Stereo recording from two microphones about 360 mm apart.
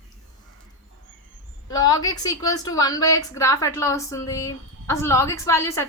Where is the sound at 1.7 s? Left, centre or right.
Centre.